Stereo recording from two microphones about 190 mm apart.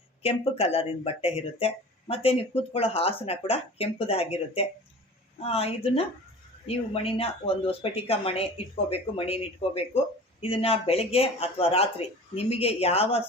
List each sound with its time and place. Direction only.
0.2 s speech: 30° left (ahead or behind)